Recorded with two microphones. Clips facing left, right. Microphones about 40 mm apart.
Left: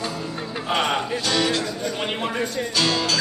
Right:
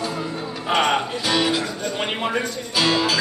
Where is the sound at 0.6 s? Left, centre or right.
Centre.